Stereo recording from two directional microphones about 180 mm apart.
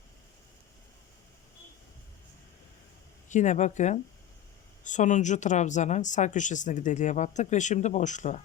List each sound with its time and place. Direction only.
3.2 s speech: 40° left (ahead or behind)